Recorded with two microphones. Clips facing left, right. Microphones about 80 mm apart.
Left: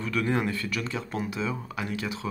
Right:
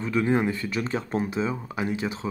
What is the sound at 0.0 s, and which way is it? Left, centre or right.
Speech, right.